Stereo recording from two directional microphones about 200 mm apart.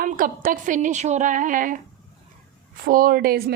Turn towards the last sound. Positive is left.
turn(degrees=-50)  # may be behind; listen again after turning